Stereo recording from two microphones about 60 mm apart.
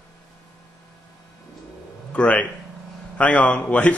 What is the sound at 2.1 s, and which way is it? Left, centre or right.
A man's voice, left.